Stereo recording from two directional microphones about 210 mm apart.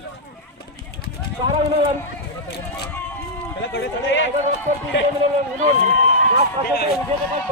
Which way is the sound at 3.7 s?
60° left (ahead or behind).